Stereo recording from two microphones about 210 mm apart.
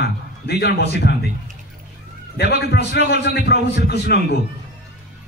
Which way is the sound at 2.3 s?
50° left (ahead or behind).